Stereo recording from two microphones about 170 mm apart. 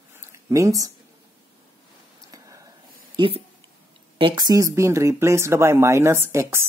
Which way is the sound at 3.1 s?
30° right (ahead or behind).